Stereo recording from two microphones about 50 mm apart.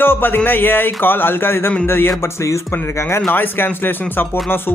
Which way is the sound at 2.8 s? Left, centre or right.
Left.